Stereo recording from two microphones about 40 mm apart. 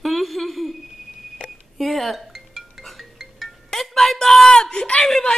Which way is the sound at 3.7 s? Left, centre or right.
Centre.